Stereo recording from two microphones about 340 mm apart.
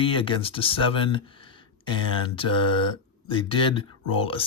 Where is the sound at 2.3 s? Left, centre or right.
Centre.